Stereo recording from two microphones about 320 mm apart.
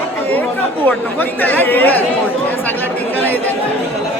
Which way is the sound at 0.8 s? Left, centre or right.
Centre.